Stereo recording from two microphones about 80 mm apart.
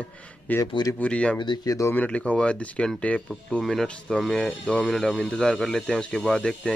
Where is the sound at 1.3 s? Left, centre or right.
Left.